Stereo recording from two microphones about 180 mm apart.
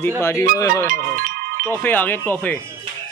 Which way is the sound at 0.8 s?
50° right (ahead or behind).